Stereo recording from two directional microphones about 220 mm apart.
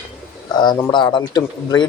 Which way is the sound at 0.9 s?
20° left (ahead or behind).